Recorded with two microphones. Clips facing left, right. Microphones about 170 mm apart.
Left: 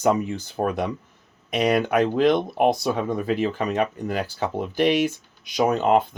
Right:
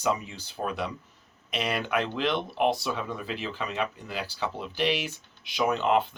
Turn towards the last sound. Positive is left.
turn(degrees=45)  # may be behind; listen again after turning